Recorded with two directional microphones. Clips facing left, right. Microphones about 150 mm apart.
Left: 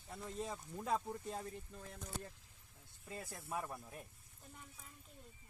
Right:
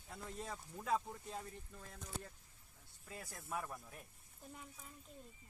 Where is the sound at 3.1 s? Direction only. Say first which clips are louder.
Left 1 dB; 25° left (ahead or behind).